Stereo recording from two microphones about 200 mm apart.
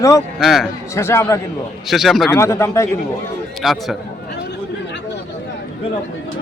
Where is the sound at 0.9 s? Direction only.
15° left (ahead or behind).